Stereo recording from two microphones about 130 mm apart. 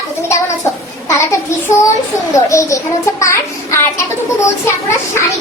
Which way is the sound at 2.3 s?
20° left (ahead or behind).